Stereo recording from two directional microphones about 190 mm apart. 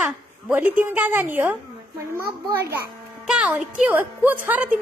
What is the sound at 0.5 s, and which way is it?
A woman's voice, 10° right (ahead or behind).